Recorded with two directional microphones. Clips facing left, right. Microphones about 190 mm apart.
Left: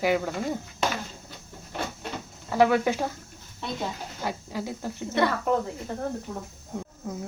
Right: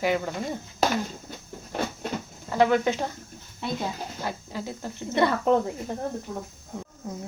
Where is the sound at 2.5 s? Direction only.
10° left (ahead or behind).